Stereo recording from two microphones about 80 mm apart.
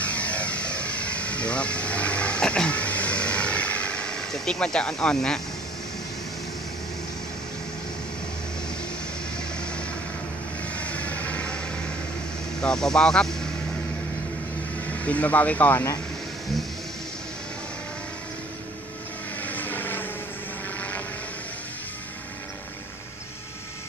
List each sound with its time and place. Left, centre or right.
0.0 s vehicle: centre
9.4 s vehicle: centre
12.5 s speech: centre
14.9 s speech: centre
19.4 s vehicle: left